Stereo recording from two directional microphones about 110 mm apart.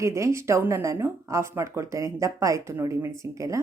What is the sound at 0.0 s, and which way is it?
Speech, 25° right (ahead or behind).